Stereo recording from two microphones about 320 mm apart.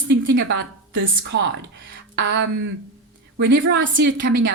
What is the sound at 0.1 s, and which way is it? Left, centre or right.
A woman's voice, right.